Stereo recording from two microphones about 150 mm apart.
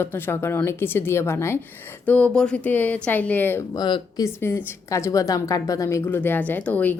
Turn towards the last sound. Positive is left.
turn(degrees=10)  # may be behind; listen again after turning